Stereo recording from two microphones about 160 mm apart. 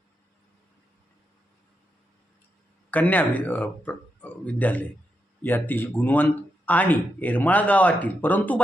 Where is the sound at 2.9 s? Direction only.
10° left (ahead or behind).